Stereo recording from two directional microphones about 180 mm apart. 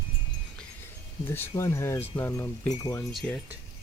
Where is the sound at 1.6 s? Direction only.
15° left (ahead or behind).